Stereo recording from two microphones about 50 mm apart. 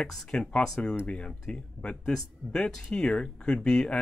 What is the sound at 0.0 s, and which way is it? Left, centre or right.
Speech, centre.